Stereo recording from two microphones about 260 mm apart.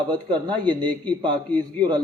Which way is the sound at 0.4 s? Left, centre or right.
Centre.